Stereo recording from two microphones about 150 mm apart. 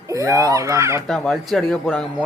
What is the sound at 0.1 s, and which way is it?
Speech, 20° right (ahead or behind).